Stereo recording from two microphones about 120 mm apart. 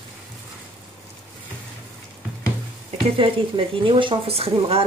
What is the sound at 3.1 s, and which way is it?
Speech, 50° right (ahead or behind).